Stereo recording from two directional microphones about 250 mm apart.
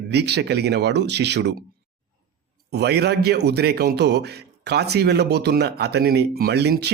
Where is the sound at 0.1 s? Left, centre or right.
Right.